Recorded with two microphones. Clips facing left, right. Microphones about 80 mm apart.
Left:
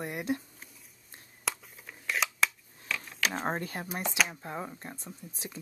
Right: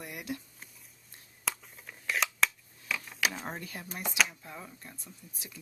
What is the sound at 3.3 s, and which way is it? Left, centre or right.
Speech, left.